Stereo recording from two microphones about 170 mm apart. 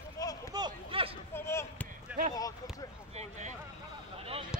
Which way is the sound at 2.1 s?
10° right (ahead or behind).